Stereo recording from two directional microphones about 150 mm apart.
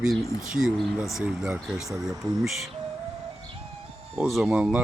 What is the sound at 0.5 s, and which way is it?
Speech, 5° right (ahead or behind).